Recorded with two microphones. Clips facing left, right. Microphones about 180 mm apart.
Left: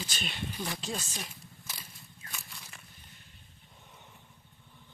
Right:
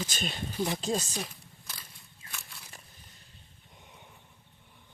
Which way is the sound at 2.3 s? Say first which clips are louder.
Even; centre (ahead or behind).